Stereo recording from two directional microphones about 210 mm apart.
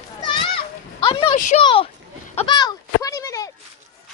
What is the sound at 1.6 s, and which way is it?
Speech, 25° left (ahead or behind).